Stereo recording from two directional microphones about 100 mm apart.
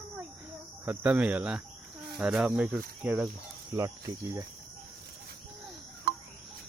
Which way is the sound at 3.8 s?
35° right (ahead or behind).